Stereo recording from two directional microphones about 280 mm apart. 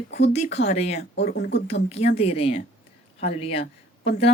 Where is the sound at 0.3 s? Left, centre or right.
Left.